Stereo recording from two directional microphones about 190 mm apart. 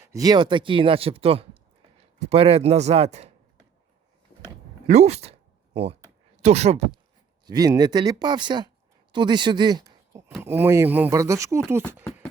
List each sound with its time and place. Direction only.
0.0 s speech: 15° right (ahead or behind); by 3.3 s 35° right (ahead or behind)
4.9 s a sound: 35° right (ahead or behind)
6.4 s speech: 35° right (ahead or behind)
7.4 s speech: 20° right (ahead or behind)